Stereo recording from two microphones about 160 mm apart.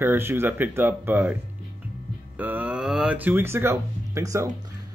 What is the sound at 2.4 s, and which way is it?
Speech, 10° right (ahead or behind).